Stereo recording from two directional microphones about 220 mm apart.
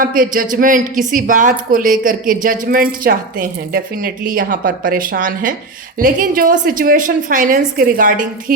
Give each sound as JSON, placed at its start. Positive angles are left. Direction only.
{"t": 0.0, "sound": "a woman's voice", "side_deg": -40}